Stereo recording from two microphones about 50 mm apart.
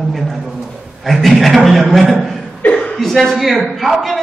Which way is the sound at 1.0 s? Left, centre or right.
Centre.